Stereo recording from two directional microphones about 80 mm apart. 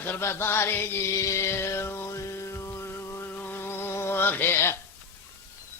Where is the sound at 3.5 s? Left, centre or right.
Left.